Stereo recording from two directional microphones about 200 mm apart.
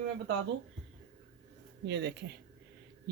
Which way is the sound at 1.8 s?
55° right (ahead or behind).